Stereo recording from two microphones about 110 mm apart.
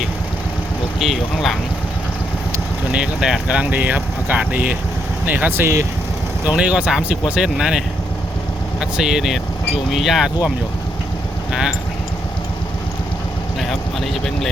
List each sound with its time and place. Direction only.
0.9 s speech: centre (ahead or behind)
2.9 s speech: 5° right (ahead or behind)
6.4 s speech: 10° right (ahead or behind)
13.6 s vehicle: centre (ahead or behind)